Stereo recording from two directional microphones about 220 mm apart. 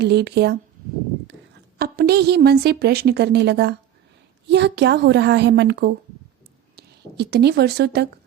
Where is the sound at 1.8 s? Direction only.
45° right (ahead or behind).